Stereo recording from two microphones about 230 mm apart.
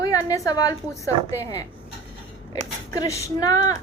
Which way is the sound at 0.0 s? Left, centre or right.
Centre.